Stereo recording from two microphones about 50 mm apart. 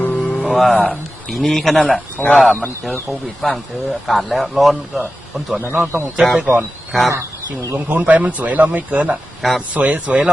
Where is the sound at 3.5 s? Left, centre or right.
Centre.